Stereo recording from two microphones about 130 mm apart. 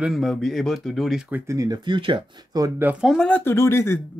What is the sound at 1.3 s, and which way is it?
Speech, 25° right (ahead or behind).